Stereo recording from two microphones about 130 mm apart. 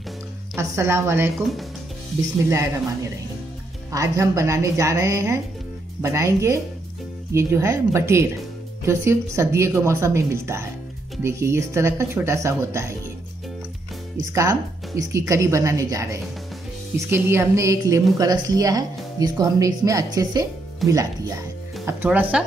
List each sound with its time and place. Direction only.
0.6 s speech: 20° right (ahead or behind)
1.4 s speech: centre (ahead or behind)
2.5 s speech: 25° right (ahead or behind)
14.3 s speech: 25° right (ahead or behind)
21.8 s speech: 15° right (ahead or behind)